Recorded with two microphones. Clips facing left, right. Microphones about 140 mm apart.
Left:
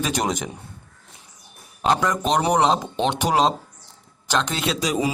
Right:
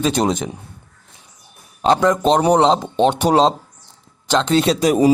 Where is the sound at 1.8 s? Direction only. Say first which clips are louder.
Right 6 dB; 30° right (ahead or behind).